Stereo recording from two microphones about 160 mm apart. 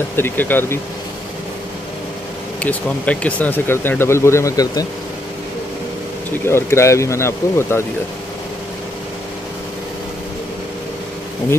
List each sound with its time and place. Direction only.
0.1 s speech: 10° left (ahead or behind)
2.6 s speech: 10° left (ahead or behind)
6.4 s speech: 15° left (ahead or behind)